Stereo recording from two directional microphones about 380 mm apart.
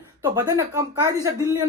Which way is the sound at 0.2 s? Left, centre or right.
Centre.